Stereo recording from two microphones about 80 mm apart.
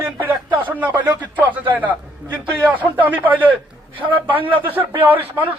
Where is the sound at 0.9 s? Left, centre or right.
Centre.